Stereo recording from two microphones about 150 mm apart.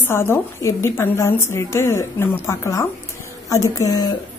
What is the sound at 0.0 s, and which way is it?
A woman's voice, 15° left (ahead or behind).